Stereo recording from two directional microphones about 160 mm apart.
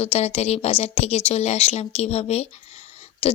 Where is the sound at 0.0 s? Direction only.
40° left (ahead or behind).